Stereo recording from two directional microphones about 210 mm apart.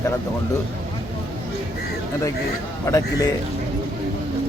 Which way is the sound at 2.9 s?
15° left (ahead or behind).